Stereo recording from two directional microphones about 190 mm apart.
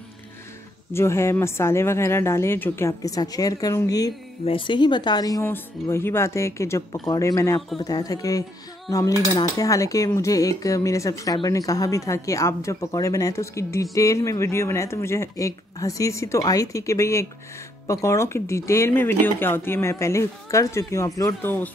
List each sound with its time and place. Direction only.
0.9 s a woman's voice: 15° left (ahead or behind)